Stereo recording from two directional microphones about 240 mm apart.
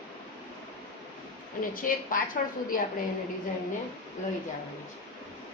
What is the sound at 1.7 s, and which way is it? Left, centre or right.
A woman's voice, left.